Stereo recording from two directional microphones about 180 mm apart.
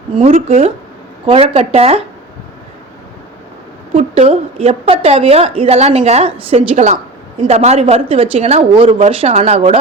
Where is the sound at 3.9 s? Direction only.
35° right (ahead or behind).